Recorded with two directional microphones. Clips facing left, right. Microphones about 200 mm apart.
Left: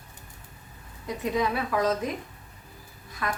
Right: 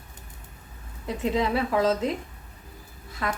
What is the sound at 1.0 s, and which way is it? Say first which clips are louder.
A woman's voice: right 2 dB; 25° right (ahead or behind).